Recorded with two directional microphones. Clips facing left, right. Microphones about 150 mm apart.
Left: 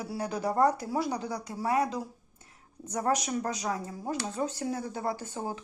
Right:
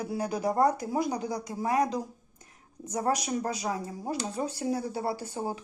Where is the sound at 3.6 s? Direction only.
25° right (ahead or behind).